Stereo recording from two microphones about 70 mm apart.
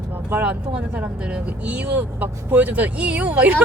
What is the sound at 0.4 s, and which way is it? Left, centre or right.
Speech, centre.